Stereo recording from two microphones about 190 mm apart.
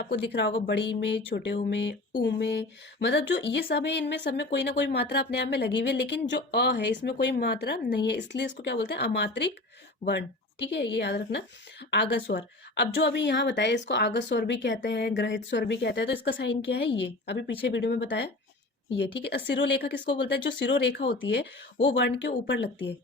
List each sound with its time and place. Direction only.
0.0 s a woman's voice: 60° left (ahead or behind)